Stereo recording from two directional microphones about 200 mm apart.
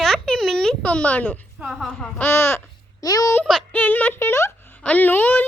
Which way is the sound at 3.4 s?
5° left (ahead or behind).